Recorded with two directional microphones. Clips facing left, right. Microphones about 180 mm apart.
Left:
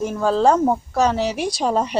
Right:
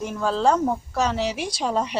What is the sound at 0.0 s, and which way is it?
Speech, 45° left (ahead or behind).